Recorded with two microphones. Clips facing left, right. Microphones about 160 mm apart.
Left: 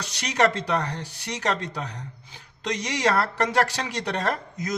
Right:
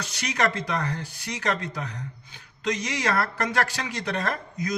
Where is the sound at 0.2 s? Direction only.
30° left (ahead or behind).